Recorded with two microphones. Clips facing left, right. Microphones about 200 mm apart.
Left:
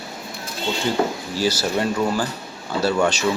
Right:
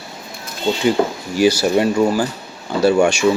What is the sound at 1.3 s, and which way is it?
Speech, 15° right (ahead or behind).